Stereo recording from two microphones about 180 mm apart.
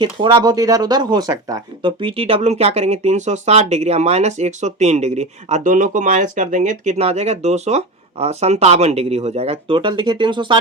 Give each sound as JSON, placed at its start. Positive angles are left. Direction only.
{"t": 0.0, "sound": "speech", "side_deg": -25}